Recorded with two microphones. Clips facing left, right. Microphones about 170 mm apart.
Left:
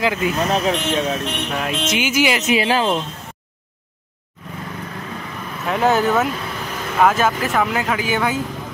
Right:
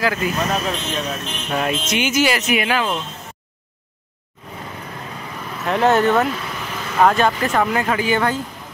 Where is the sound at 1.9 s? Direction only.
5° left (ahead or behind); by 2.9 s 35° left (ahead or behind).